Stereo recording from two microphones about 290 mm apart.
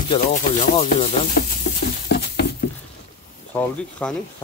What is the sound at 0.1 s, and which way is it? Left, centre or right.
Speech, left.